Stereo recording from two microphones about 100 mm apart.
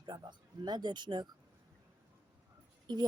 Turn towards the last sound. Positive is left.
turn(degrees=-45)  # may be behind; listen again after turning